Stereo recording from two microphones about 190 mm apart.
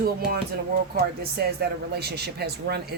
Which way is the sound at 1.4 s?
55° right (ahead or behind).